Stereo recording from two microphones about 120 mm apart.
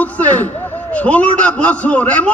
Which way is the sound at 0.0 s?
15° left (ahead or behind).